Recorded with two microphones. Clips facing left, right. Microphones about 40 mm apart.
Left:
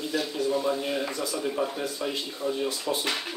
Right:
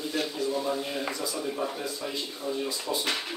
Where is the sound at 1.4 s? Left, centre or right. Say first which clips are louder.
Left 3 dB; centre.